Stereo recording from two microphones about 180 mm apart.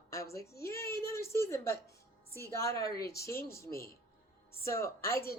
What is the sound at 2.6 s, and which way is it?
Speech, 20° left (ahead or behind).